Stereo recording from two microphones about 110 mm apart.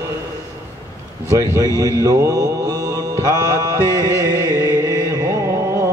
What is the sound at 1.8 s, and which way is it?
Mantra, 30° right (ahead or behind).